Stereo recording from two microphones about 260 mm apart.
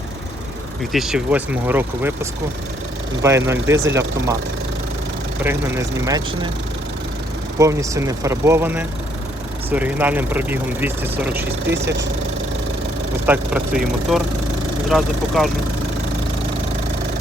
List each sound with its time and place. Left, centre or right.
0.9 s speech: centre
3.2 s speech: centre
5.4 s speech: centre
7.6 s speech: centre
11.7 s speech: right
13.2 s speech: centre